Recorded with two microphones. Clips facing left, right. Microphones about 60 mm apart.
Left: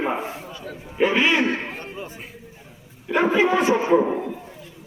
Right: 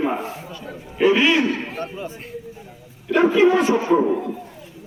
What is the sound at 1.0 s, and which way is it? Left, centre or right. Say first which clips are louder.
Speech: right 3 dB; left.